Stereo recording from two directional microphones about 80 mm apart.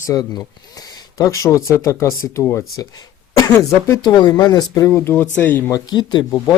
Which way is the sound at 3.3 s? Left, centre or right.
Left.